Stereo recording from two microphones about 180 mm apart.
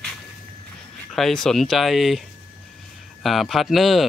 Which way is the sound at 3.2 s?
Centre (ahead or behind).